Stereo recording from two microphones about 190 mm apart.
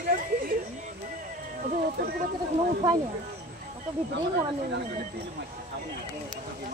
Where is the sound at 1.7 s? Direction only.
50° right (ahead or behind).